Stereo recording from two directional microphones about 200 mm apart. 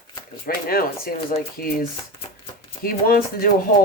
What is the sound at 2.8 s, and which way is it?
Speech, 45° left (ahead or behind).